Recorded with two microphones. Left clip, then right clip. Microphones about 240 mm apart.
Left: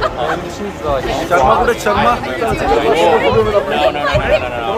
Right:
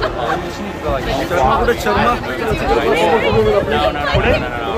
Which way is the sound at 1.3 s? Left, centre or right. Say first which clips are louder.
Left 3 dB; centre.